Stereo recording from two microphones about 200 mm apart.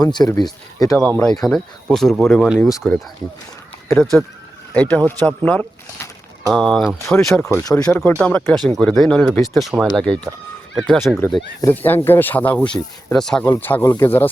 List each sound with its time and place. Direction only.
0.0 s speech: 20° left (ahead or behind)
0.9 s speech: 5° left (ahead or behind)
2.7 s speech: 10° left (ahead or behind)
3.8 s speech: centre (ahead or behind)